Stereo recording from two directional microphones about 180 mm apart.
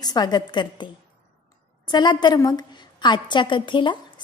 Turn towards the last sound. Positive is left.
turn(degrees=25)  # may be behind; listen again after turning